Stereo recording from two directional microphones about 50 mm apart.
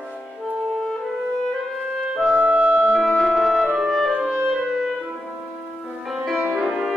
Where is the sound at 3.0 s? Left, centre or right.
Centre.